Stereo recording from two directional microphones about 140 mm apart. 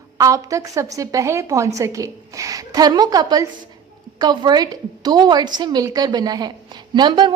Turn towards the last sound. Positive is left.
turn(degrees=-35)  # may be behind; listen again after turning